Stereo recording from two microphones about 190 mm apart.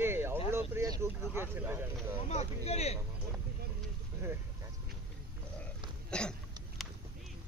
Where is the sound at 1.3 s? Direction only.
10° right (ahead or behind).